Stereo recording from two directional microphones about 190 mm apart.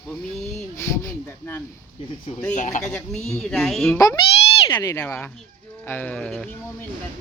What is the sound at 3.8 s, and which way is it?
Speech, 15° left (ahead or behind).